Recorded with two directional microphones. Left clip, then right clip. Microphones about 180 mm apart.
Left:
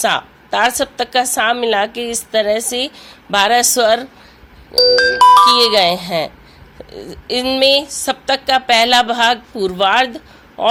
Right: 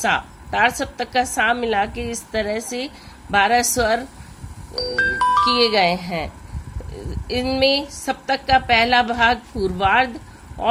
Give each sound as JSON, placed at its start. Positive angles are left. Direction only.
{"t": 0.0, "sound": "speech", "side_deg": 20}